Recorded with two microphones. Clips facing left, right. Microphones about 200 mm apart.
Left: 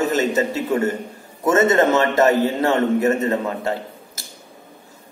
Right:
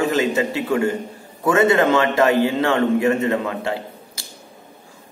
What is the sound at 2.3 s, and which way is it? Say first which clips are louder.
A man's voice: even; 40° left (ahead or behind).